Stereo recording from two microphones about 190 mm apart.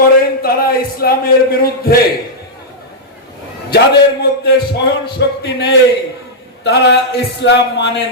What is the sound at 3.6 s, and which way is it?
A man's voice, 60° left (ahead or behind).